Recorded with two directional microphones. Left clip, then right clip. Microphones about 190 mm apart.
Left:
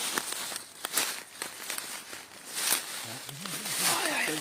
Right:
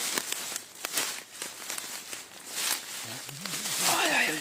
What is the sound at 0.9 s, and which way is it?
Walk, 15° left (ahead or behind).